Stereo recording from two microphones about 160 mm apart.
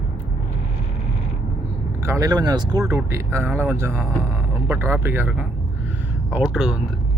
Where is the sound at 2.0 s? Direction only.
20° right (ahead or behind).